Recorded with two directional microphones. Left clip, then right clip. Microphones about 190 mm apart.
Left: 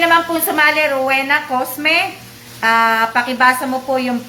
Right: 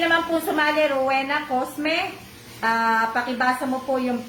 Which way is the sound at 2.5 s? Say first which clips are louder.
Left 7 dB; 10° left (ahead or behind).